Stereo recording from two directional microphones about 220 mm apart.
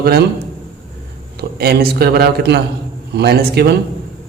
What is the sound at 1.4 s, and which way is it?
A man's voice, 45° right (ahead or behind).